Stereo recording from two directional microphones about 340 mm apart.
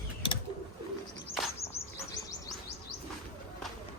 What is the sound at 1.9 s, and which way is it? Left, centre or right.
Bird, centre.